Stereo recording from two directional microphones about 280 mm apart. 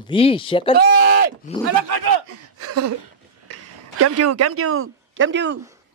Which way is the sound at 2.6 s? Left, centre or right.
Right.